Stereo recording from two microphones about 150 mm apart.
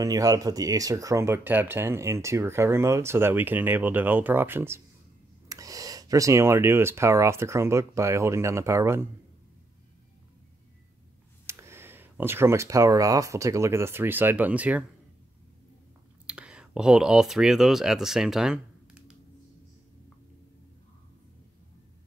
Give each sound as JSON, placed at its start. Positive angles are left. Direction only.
{"t": 0.0, "sound": "speech", "side_deg": -25}
{"t": 11.4, "sound": "speech", "side_deg": -15}
{"t": 16.3, "sound": "speech", "side_deg": -5}